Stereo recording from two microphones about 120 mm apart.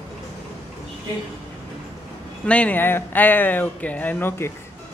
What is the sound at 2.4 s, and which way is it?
Speech, 10° left (ahead or behind).